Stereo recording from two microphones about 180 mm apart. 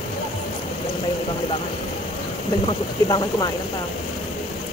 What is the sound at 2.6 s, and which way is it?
Speech, 25° left (ahead or behind).